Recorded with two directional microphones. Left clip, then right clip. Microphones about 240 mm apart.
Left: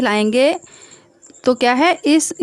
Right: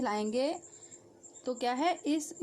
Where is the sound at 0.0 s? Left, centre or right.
Left.